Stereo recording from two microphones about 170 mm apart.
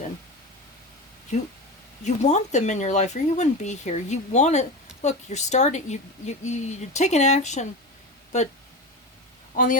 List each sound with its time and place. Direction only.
2.0 s a woman's voice: 45° left (ahead or behind)